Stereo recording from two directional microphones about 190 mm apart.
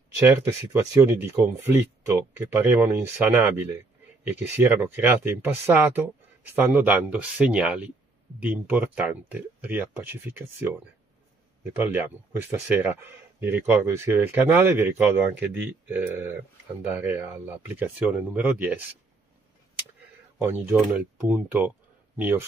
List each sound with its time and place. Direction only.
0.3 s speech: 15° right (ahead or behind)
20.3 s speech: 10° right (ahead or behind)